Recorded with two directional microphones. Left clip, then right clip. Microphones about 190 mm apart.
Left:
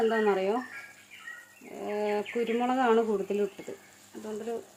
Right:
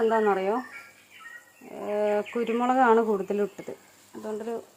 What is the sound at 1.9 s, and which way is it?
Speech, 5° right (ahead or behind).